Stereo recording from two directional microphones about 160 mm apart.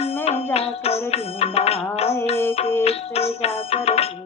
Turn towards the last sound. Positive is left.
turn(degrees=40)  # may be behind; listen again after turning